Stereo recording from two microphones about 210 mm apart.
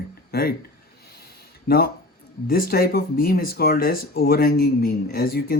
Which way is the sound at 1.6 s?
45° left (ahead or behind).